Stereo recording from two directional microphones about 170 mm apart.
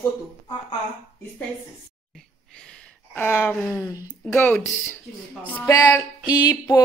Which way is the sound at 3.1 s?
10° left (ahead or behind).